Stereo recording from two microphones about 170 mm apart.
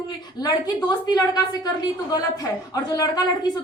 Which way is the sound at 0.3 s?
20° left (ahead or behind).